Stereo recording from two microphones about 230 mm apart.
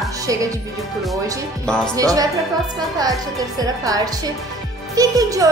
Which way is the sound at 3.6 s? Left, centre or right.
Centre.